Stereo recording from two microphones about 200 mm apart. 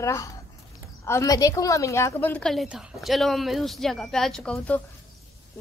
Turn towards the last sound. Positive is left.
turn(degrees=5)  # may be behind; listen again after turning